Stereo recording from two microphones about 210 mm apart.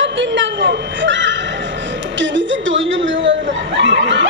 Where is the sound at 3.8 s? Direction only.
60° right (ahead or behind).